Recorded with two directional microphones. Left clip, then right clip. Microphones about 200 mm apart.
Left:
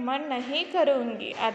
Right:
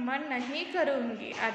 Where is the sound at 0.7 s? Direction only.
20° left (ahead or behind).